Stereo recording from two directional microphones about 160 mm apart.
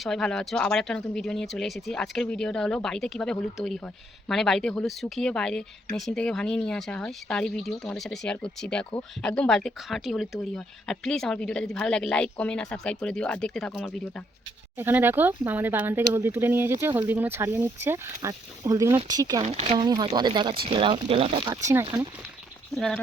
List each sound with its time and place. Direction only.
0.0 s speech: 5° left (ahead or behind)
14.8 s speech: 15° right (ahead or behind)
19.4 s speech: 40° right (ahead or behind)
19.9 s speech: 25° right (ahead or behind)
21.5 s speech: 20° right (ahead or behind)
22.7 s speech: 5° left (ahead or behind)